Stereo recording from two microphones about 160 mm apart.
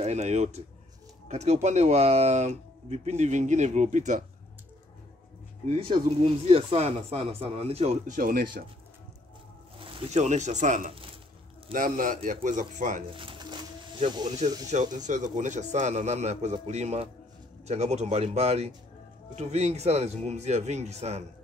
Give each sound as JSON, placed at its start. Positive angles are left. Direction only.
{"t": 0.0, "sound": "speech", "side_deg": -45}
{"t": 5.7, "sound": "speech", "side_deg": -40}
{"t": 8.2, "sound": "speech", "side_deg": -70}
{"t": 9.8, "sound": "a man's voice", "side_deg": -40}
{"t": 13.0, "sound": "a sound", "side_deg": -35}
{"t": 14.4, "sound": "speech", "side_deg": -45}